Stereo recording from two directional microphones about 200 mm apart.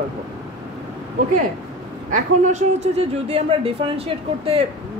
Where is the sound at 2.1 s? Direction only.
35° right (ahead or behind).